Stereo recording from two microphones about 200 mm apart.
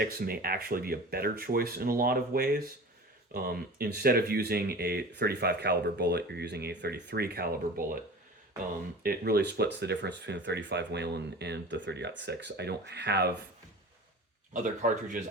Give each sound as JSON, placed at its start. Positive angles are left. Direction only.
{"t": 0.0, "sound": "speech", "side_deg": -50}
{"t": 9.0, "sound": "speech", "side_deg": -50}
{"t": 14.5, "sound": "speech", "side_deg": -40}